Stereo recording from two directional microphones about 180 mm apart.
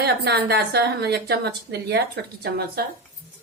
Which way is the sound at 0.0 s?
65° right (ahead or behind).